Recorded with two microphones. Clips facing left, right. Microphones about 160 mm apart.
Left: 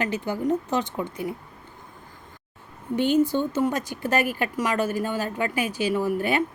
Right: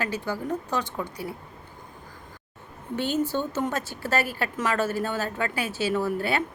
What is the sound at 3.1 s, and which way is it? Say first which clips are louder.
A woman's voice: left 5 dB; 15° left (ahead or behind).